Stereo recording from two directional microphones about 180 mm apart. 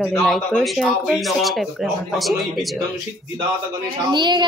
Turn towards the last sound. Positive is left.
turn(degrees=-25)  # may be behind; listen again after turning